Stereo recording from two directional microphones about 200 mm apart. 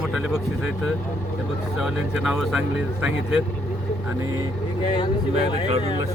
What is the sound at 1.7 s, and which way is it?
Speech, centre (ahead or behind).